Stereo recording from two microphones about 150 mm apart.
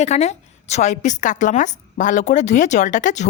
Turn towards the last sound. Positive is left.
turn(degrees=55)  # may be behind; listen again after turning